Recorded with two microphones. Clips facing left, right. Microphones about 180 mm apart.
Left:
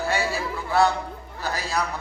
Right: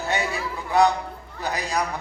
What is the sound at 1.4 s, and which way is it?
Speech, 15° right (ahead or behind).